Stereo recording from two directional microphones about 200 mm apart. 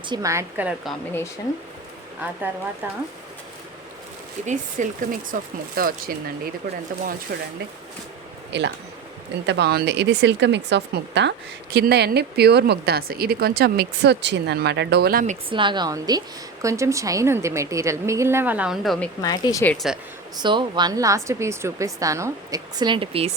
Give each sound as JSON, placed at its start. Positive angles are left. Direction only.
{"t": 0.1, "sound": "a woman's voice", "side_deg": -15}
{"t": 2.8, "sound": "a woman's voice", "side_deg": -10}
{"t": 4.4, "sound": "speech", "side_deg": -35}
{"t": 8.5, "sound": "speech", "side_deg": -60}
{"t": 15.4, "sound": "a woman's voice", "side_deg": -25}
{"t": 19.2, "sound": "speech", "side_deg": 20}
{"t": 19.7, "sound": "speech", "side_deg": 0}
{"t": 20.3, "sound": "a woman's voice", "side_deg": -25}